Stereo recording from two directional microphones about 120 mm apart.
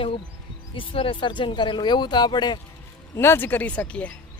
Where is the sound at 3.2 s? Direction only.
20° left (ahead or behind).